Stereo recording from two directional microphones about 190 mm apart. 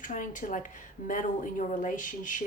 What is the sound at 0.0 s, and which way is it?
Speech, 40° left (ahead or behind).